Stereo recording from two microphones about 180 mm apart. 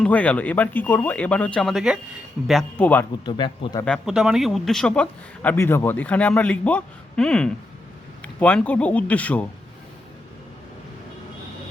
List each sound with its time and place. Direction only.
0.0 s speech: 10° left (ahead or behind)
3.2 s speech: 25° left (ahead or behind)
3.8 s speech: centre (ahead or behind)